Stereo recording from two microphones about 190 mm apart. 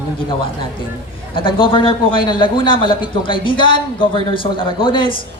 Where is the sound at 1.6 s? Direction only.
25° left (ahead or behind).